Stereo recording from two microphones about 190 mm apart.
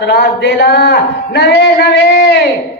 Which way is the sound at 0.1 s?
60° left (ahead or behind).